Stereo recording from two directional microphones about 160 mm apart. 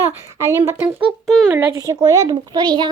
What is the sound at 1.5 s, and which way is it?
Speech, 15° right (ahead or behind).